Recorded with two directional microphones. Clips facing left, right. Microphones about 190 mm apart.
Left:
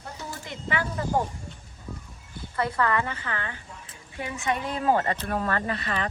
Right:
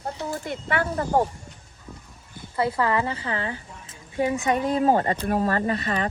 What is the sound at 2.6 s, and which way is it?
A woman's voice, 30° right (ahead or behind).